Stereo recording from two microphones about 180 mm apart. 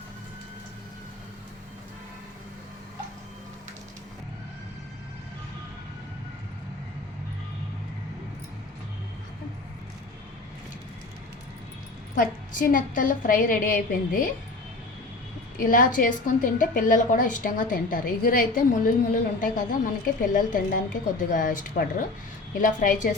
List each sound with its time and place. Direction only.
12.1 s a woman's voice: 45° left (ahead or behind)
15.5 s a woman's voice: 50° left (ahead or behind)